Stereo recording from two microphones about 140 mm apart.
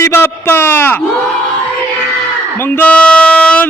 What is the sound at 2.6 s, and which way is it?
A man's voice, 15° left (ahead or behind).